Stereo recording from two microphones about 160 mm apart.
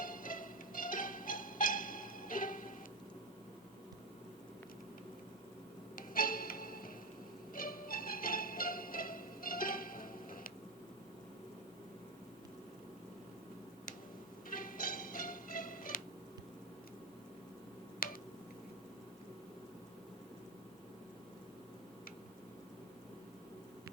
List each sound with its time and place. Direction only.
0.0 s music: 60° left (ahead or behind)
6.0 s music: 60° left (ahead or behind)
14.5 s music: 60° left (ahead or behind)
18.0 s tick-tock: 60° left (ahead or behind)